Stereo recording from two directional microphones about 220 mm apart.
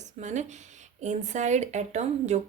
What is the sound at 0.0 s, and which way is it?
Speech, 30° right (ahead or behind).